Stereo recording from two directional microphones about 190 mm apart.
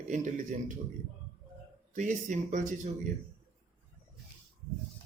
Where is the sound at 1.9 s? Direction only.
40° right (ahead or behind).